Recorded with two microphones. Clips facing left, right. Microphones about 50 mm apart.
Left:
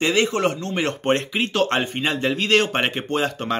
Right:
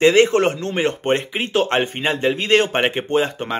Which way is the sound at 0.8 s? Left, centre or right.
Centre.